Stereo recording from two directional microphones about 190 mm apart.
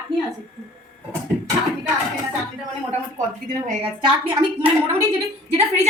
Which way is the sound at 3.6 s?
30° right (ahead or behind).